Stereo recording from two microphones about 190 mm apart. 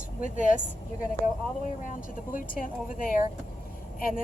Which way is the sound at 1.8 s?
45° left (ahead or behind).